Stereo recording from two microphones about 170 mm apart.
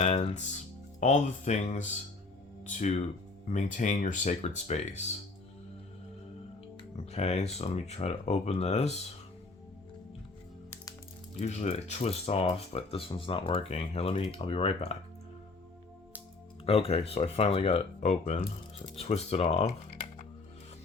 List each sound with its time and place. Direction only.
0.0 s music: 35° left (ahead or behind)
0.9 s speech: 45° left (ahead or behind)
6.9 s speech: 40° left (ahead or behind)
11.3 s speech: 40° left (ahead or behind)
16.6 s speech: 35° left (ahead or behind)